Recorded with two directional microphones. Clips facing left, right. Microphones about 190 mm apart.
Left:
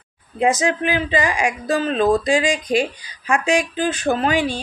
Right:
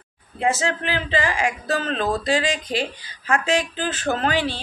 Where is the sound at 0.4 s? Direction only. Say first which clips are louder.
Left 4 dB; 15° left (ahead or behind).